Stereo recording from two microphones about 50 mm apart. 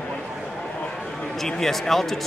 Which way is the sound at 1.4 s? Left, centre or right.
Centre.